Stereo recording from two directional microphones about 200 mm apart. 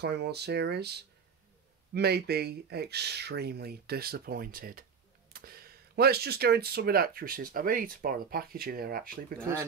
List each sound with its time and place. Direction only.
0.0 s speech: 55° right (ahead or behind)
9.4 s speech: 15° right (ahead or behind)